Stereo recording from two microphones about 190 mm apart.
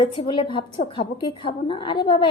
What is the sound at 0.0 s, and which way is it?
A woman's voice, 25° left (ahead or behind).